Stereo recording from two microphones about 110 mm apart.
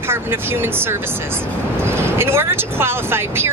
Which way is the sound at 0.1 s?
20° right (ahead or behind).